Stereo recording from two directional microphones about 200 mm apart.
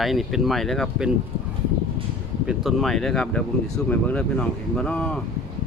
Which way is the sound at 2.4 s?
Centre (ahead or behind).